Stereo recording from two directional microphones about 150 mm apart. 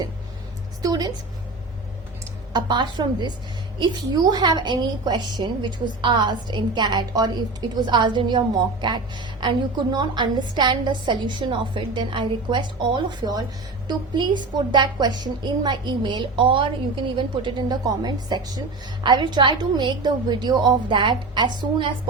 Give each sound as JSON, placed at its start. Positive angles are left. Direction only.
{"t": 0.8, "sound": "a woman's voice", "side_deg": -25}
{"t": 2.5, "sound": "a woman's voice", "side_deg": -30}